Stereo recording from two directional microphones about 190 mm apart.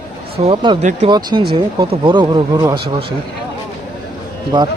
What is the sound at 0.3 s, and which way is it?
Speech, 30° right (ahead or behind).